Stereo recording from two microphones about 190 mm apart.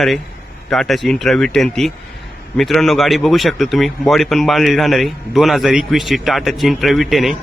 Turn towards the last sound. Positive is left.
turn(degrees=0)  # may be behind; listen again after turning